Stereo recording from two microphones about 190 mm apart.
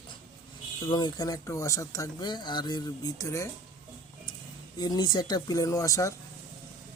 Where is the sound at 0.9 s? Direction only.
20° left (ahead or behind).